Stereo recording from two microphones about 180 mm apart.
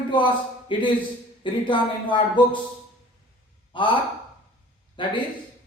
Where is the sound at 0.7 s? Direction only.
25° left (ahead or behind).